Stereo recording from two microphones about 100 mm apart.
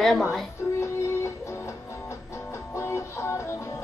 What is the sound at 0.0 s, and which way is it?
Speech, 5° left (ahead or behind).